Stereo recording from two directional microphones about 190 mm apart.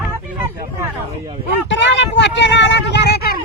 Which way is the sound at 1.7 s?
70° left (ahead or behind).